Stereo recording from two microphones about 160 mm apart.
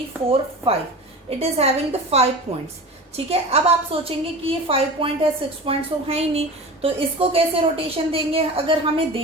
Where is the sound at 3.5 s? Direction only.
40° right (ahead or behind).